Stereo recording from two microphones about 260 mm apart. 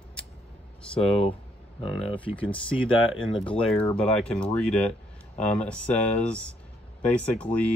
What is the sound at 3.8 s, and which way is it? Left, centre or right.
Speech, centre.